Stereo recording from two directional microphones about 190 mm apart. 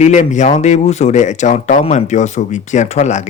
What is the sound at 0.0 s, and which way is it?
Speech, 40° left (ahead or behind).